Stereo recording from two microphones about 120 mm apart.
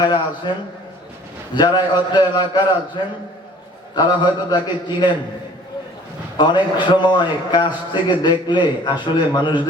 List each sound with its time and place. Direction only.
0.0 s a man's voice: 40° left (ahead or behind)
1.5 s a man's voice: 40° left (ahead or behind)
3.9 s a man's voice: 35° left (ahead or behind)
6.3 s a man's voice: 40° left (ahead or behind)